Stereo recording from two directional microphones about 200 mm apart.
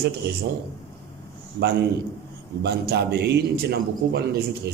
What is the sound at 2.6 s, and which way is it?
A man's voice, 55° right (ahead or behind).